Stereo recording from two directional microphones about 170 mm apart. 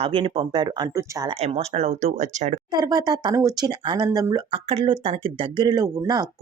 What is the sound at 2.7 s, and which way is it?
Speech, 25° right (ahead or behind).